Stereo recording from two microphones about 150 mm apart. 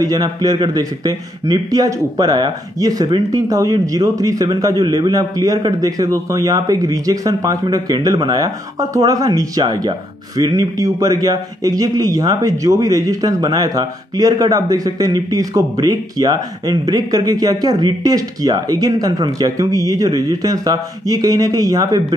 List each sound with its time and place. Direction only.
0.0 s a man's voice: 25° right (ahead or behind)